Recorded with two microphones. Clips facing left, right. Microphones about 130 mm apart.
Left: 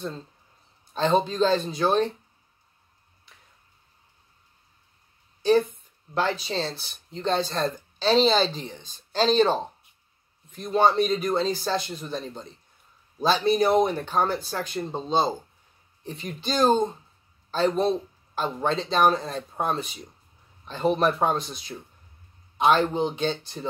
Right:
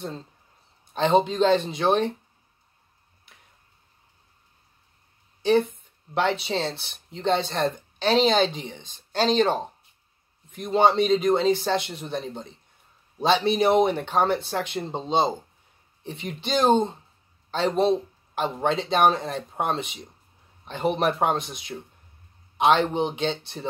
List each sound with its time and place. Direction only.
1.0 s speech: 20° right (ahead or behind)
5.4 s speech: 25° right (ahead or behind)
13.2 s speech: 25° right (ahead or behind)
18.3 s speech: 65° right (ahead or behind)
18.9 s speech: 20° right (ahead or behind)
21.7 s speech: 45° right (ahead or behind)
22.6 s speech: 25° right (ahead or behind)